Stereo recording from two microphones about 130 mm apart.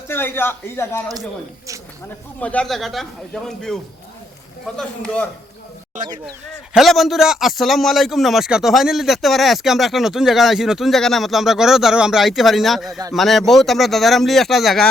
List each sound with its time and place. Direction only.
0.1 s a man's voice: 15° left (ahead or behind)
2.4 s a man's voice: 10° left (ahead or behind)
4.8 s a man's voice: 10° left (ahead or behind)
6.7 s a man's voice: centre (ahead or behind)